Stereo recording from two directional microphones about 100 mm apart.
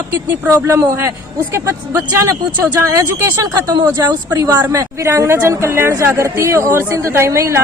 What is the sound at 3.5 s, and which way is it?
A woman's voice, 40° right (ahead or behind).